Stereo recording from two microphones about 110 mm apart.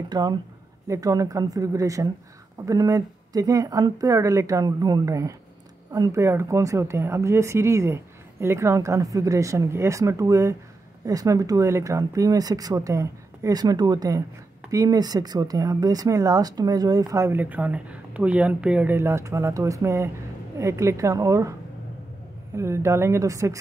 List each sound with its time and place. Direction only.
0.1 s speech: 40° right (ahead or behind)
22.6 s speech: 25° right (ahead or behind)